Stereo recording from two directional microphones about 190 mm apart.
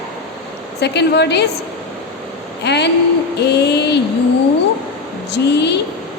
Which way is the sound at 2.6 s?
65° left (ahead or behind).